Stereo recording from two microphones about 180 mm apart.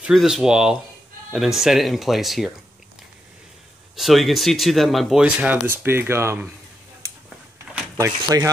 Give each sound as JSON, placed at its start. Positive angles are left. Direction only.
{"t": 0.0, "sound": "speech", "side_deg": 0}
{"t": 3.9, "sound": "speech", "side_deg": 0}
{"t": 8.0, "sound": "speech", "side_deg": -20}